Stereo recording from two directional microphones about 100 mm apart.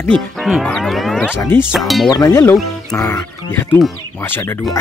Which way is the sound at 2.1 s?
30° left (ahead or behind).